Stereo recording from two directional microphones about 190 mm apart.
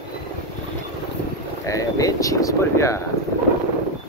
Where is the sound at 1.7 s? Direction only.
15° left (ahead or behind).